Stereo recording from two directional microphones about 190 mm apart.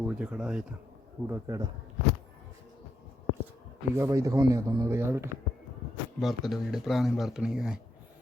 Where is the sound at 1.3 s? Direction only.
15° right (ahead or behind).